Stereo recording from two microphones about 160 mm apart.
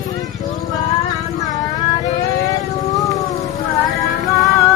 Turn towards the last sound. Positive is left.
turn(degrees=20)  # may be behind; listen again after turning